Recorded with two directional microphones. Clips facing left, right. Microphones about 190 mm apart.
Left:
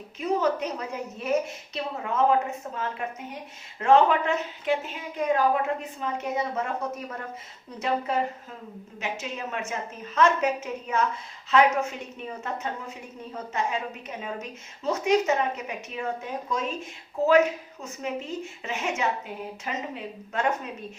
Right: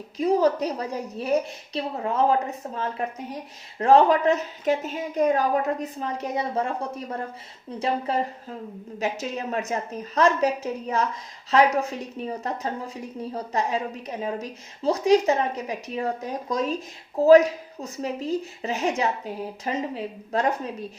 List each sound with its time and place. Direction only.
0.2 s a woman's voice: 35° right (ahead or behind)